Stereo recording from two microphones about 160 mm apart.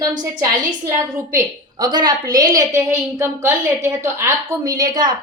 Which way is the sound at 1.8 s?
25° right (ahead or behind).